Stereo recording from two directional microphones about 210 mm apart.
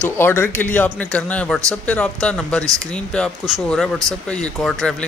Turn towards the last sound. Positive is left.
turn(degrees=5)  # may be behind; listen again after turning